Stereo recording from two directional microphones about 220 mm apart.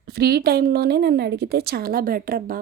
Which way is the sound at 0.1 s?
45° right (ahead or behind).